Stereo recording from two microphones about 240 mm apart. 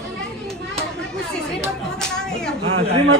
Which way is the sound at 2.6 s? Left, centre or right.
Right.